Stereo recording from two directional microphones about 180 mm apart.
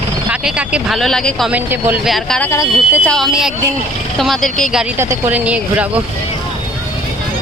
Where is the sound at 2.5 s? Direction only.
15° left (ahead or behind); by 4.9 s centre (ahead or behind).